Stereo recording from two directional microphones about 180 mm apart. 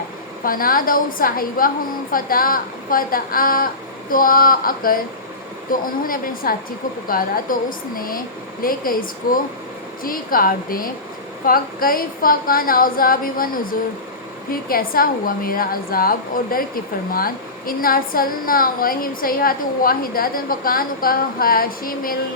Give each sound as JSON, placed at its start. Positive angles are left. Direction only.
{"t": 0.4, "sound": "a woman's voice", "side_deg": 50}